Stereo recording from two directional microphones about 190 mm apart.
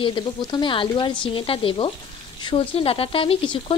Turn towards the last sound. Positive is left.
turn(degrees=25)  # may be behind; listen again after turning